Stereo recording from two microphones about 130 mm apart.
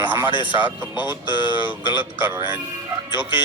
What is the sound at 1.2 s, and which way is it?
Speech, 40° left (ahead or behind).